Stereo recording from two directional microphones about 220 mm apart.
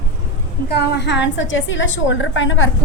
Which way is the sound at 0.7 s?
50° left (ahead or behind).